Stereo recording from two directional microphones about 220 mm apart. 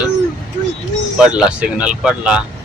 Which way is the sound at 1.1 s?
5° right (ahead or behind).